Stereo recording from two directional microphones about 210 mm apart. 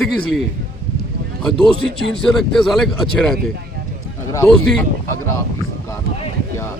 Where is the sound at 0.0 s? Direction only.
Centre (ahead or behind).